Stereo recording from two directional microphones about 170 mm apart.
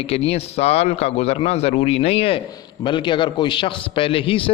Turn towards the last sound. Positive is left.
turn(degrees=30)  # may be behind; listen again after turning